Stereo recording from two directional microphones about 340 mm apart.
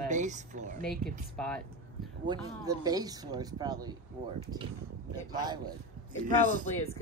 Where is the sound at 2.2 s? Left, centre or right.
Centre.